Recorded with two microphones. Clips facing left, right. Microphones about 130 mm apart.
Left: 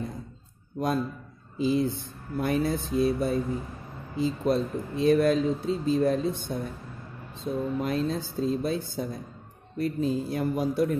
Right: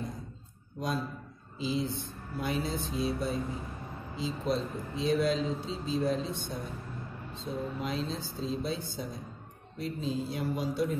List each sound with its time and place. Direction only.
0.7 s speech: 55° left (ahead or behind)